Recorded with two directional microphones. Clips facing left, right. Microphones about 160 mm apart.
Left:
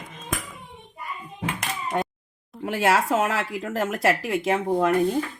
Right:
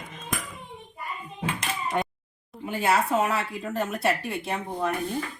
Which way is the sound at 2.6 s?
90° left.